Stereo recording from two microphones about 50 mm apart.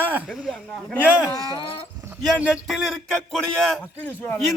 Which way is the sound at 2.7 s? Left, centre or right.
Centre.